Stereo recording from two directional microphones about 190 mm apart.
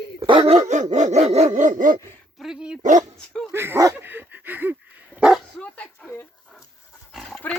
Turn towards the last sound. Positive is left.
turn(degrees=0)  # may be behind; listen again after turning